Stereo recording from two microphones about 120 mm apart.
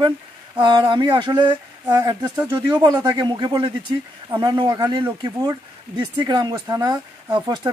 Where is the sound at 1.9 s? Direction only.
25° right (ahead or behind).